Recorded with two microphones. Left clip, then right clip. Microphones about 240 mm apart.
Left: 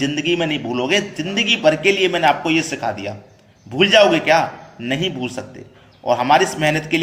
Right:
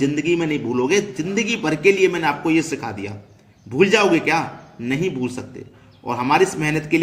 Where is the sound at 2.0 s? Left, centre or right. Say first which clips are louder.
Left 3 dB; centre.